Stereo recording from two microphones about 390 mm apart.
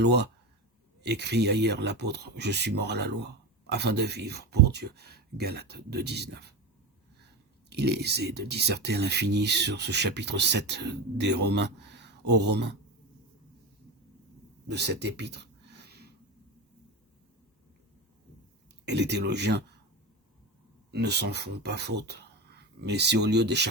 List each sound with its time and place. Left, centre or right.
0.0 s speech: right
7.7 s speech: right
14.7 s a sound: right
18.9 s speech: right
20.9 s speech: right